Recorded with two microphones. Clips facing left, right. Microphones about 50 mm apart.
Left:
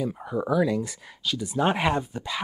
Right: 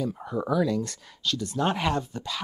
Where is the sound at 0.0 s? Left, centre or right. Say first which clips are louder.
Left 1 dB; centre.